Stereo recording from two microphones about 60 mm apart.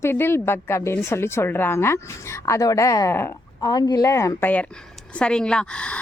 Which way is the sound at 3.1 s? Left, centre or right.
Left.